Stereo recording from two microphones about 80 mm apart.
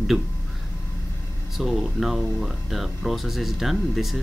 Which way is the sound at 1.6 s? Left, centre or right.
Centre.